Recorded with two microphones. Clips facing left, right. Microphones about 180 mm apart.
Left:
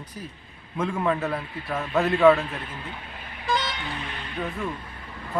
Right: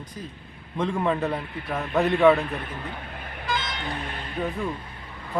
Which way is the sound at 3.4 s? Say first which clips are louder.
Left 3 dB; 50° right (ahead or behind).